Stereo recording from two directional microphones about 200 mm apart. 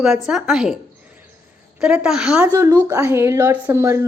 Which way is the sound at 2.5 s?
20° right (ahead or behind).